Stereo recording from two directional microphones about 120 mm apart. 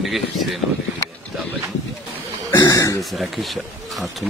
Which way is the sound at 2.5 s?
30° left (ahead or behind).